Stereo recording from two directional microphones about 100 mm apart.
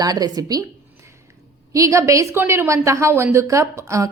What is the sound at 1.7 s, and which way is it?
A woman's voice, 35° right (ahead or behind).